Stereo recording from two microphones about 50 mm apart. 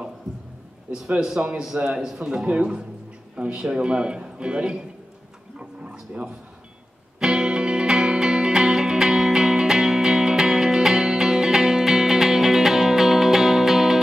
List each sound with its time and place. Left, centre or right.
1.2 s a man's voice: centre
5.6 s dog: right
7.2 s music: centre